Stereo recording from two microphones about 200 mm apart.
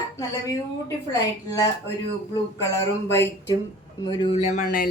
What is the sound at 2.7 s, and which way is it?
A woman's voice, 15° left (ahead or behind).